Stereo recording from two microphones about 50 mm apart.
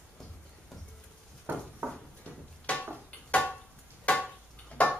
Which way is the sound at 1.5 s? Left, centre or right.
Right.